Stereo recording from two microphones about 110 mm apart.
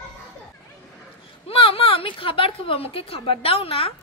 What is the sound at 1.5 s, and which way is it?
A woman's voice, 60° left (ahead or behind).